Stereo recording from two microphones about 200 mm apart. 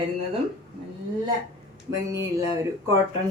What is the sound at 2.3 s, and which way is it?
Speech, 15° right (ahead or behind).